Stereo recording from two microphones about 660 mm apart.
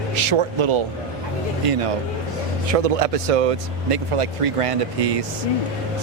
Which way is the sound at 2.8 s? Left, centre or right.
Right.